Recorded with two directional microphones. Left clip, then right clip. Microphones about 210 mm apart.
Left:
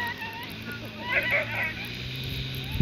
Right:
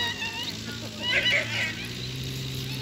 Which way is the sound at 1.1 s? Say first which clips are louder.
Right 1 dB; 15° left (ahead or behind).